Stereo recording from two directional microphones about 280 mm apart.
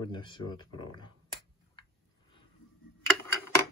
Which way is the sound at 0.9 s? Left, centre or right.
Centre.